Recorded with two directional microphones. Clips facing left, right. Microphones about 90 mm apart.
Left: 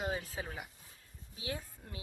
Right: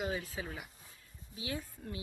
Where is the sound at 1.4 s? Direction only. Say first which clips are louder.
Right 1 dB; 30° left (ahead or behind).